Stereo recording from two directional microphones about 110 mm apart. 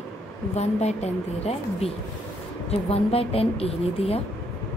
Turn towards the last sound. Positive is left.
turn(degrees=65)  # may be behind; listen again after turning